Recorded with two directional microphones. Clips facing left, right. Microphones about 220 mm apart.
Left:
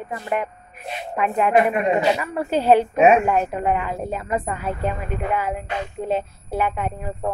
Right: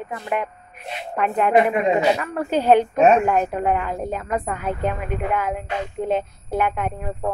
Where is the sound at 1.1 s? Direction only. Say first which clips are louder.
Right 1 dB; 5° left (ahead or behind).